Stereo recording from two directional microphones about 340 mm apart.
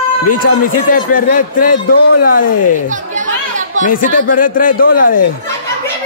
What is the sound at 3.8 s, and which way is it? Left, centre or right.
A man's voice, left.